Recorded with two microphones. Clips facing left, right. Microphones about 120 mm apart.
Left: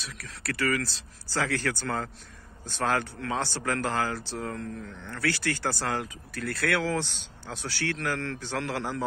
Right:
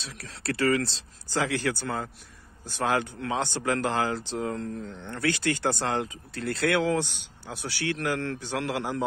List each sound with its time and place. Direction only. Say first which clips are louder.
0.0 s speech: right 3 dB; 30° right (ahead or behind)